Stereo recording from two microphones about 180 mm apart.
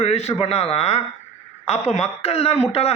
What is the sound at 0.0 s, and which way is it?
A man's voice, 35° left (ahead or behind).